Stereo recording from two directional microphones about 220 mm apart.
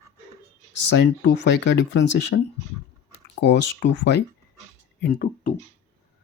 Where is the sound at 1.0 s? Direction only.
55° left (ahead or behind).